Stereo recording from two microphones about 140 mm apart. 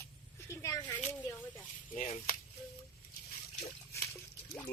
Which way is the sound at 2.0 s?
65° left (ahead or behind).